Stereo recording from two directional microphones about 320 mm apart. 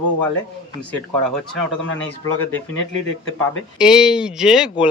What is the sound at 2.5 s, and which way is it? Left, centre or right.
Speech, left.